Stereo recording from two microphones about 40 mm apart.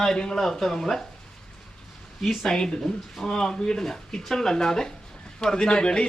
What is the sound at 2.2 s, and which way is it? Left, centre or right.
Speech, centre.